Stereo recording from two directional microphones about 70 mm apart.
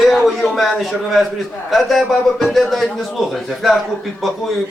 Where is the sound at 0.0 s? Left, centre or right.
Centre.